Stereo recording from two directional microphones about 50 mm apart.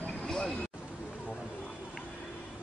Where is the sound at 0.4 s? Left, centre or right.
Left.